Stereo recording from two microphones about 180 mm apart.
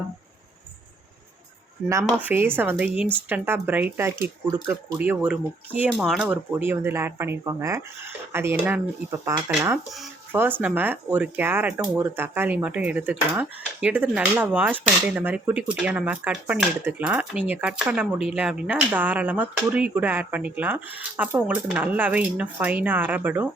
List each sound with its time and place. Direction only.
2.0 s speech: 10° right (ahead or behind)